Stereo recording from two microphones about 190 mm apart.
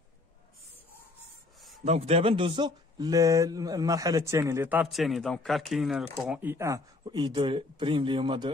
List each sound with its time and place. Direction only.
1.9 s speech: 35° right (ahead or behind)